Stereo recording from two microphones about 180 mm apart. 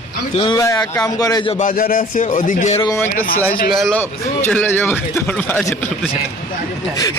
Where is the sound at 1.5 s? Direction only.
50° left (ahead or behind).